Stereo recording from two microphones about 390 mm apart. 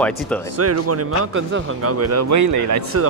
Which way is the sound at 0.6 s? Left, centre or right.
Right.